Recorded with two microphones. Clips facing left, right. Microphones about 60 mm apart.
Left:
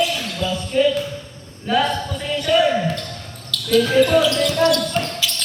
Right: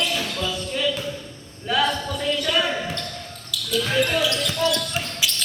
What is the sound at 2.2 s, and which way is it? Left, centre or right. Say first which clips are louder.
Basketball bounce: right 1 dB; left.